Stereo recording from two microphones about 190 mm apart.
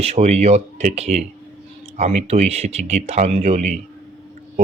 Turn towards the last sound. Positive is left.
turn(degrees=-35)  # may be behind; listen again after turning